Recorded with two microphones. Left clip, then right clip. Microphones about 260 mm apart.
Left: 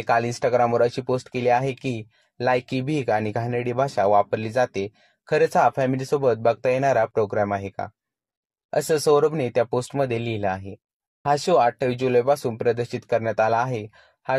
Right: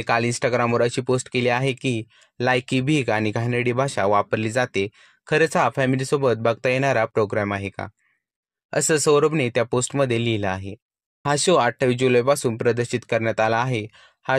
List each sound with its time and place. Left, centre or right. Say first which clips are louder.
0.0 s speech: even; right
2.6 s speech: right 3 dB; right
8.6 s a sound: right 1 dB; right
8.9 s speech: right 1 dB; right
9.2 s speech: right 1 dB; right
9.5 s speech: even; right
12.5 s speech: right 1 dB; right
13.0 s speech: left 1 dB; right